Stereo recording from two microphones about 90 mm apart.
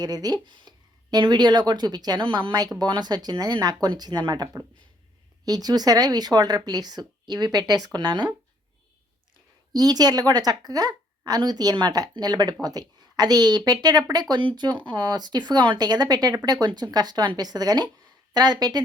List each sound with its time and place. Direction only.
0.0 s speech: 45° right (ahead or behind)
2.2 s speech: 65° right (ahead or behind)
9.7 s a woman's voice: 45° right (ahead or behind)